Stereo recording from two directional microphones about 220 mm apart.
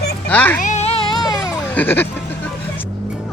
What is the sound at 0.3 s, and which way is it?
Speech, 5° left (ahead or behind).